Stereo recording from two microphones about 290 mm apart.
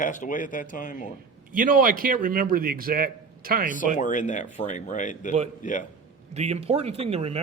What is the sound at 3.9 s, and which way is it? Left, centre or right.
A man's voice, left.